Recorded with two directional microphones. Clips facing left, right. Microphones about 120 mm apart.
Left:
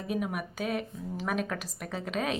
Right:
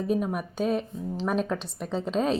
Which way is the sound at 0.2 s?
35° right (ahead or behind).